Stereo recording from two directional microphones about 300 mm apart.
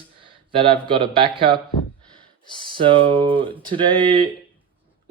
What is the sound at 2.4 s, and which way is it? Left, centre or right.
Speech, centre.